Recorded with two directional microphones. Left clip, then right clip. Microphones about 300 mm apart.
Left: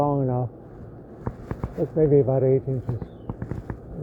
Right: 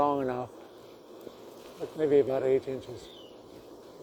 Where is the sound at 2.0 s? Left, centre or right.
Right.